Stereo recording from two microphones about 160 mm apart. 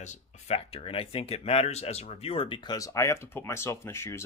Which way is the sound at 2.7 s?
20° left (ahead or behind).